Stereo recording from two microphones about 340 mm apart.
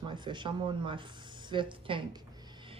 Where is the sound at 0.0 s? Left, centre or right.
Centre.